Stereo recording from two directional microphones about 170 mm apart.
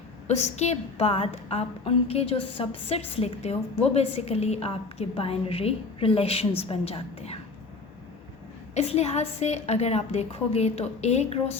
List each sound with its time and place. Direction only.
0.3 s a woman's voice: 40° left (ahead or behind)
8.7 s a woman's voice: 40° left (ahead or behind)